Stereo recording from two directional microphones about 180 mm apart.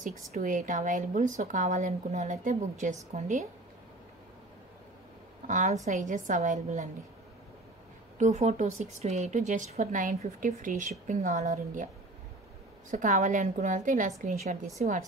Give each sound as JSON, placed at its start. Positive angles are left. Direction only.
{"t": 0.0, "sound": "a woman's voice", "side_deg": -50}
{"t": 5.5, "sound": "a woman's voice", "side_deg": -45}
{"t": 8.2, "sound": "a woman's voice", "side_deg": -40}
{"t": 12.9, "sound": "a woman's voice", "side_deg": -45}